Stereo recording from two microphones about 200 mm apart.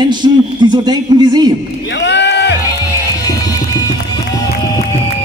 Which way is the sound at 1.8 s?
60° left (ahead or behind).